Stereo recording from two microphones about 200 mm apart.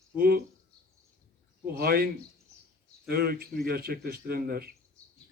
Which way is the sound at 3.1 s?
50° right (ahead or behind).